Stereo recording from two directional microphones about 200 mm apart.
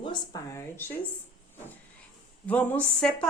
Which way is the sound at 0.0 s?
20° left (ahead or behind).